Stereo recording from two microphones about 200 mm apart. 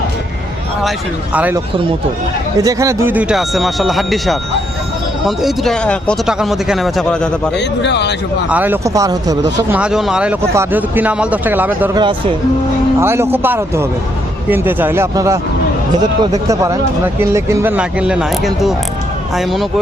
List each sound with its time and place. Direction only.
0.9 s a man's voice: 5° right (ahead or behind)
7.8 s speech: 60° left (ahead or behind)
8.4 s a man's voice: 10° right (ahead or behind)
9.7 s a man's voice: 5° right (ahead or behind)
11.9 s speech: 25° right (ahead or behind)
13.0 s a man's voice: 10° right (ahead or behind)